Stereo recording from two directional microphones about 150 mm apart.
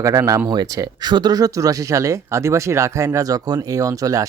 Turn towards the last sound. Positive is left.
turn(degrees=-25)  # may be behind; listen again after turning